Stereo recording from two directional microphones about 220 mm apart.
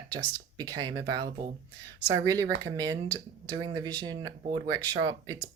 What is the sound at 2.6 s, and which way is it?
Speech, 15° right (ahead or behind).